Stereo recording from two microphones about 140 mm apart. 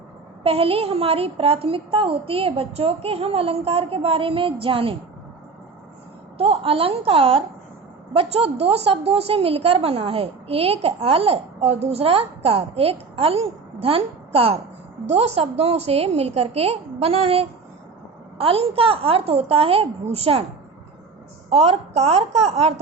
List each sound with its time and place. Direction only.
0.4 s a woman's voice: 40° right (ahead or behind)
6.3 s a woman's voice: 45° right (ahead or behind)
21.5 s a woman's voice: 45° right (ahead or behind)